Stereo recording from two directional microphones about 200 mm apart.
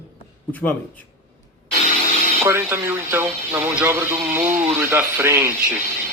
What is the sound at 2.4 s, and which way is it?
Speech, 10° right (ahead or behind).